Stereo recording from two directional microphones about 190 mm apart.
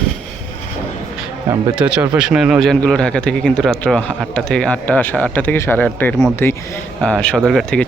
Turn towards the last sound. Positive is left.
turn(degrees=0)  # may be behind; listen again after turning